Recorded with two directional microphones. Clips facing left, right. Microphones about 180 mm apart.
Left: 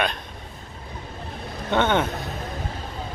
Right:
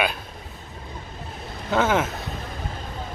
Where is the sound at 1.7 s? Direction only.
5° right (ahead or behind).